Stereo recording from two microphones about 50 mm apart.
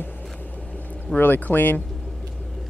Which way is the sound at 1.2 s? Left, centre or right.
Left.